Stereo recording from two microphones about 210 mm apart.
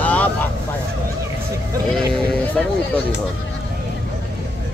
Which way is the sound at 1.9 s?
5° left (ahead or behind).